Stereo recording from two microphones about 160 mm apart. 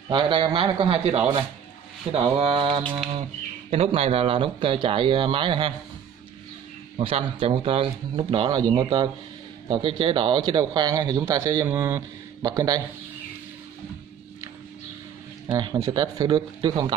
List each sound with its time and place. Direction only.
0.1 s speech: 30° right (ahead or behind)
7.0 s speech: 35° right (ahead or behind)
15.4 s speech: 30° right (ahead or behind)